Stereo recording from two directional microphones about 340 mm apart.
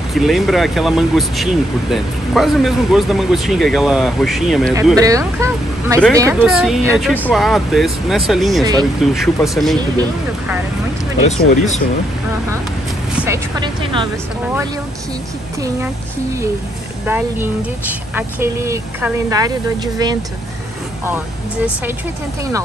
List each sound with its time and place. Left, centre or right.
0.1 s speech: centre
11.2 s speech: centre
13.2 s speech: centre
17.0 s speech: centre